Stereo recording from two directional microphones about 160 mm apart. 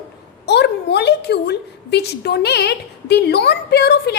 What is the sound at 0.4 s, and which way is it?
A woman's voice, 90° left.